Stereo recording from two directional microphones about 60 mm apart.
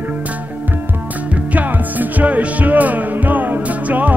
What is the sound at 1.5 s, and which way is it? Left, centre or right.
Music, right.